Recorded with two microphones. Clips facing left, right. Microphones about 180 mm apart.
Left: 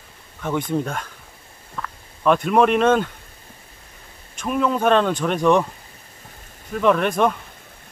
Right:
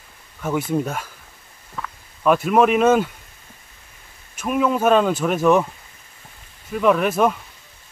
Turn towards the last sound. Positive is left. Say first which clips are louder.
# right 1 dB
turn(degrees=-5)  # may be behind; listen again after turning